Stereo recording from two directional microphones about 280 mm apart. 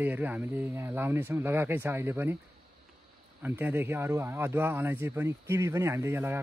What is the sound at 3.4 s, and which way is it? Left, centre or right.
Speech, centre.